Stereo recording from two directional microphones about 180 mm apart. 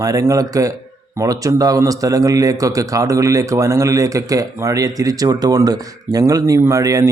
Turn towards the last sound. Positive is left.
turn(degrees=-20)  # may be behind; listen again after turning